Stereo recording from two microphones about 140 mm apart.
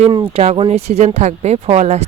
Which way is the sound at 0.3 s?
45° right (ahead or behind).